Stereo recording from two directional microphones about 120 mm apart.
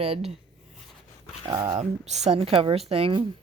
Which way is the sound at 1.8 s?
70° right (ahead or behind).